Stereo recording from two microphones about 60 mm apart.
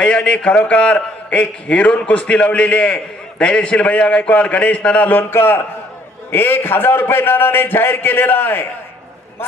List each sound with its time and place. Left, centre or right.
0.0 s a man's voice: centre
5.3 s a man's voice: left